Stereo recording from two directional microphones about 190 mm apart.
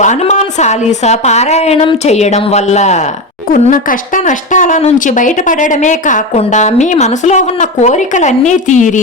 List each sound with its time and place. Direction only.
0.0 s a woman's voice: 40° left (ahead or behind)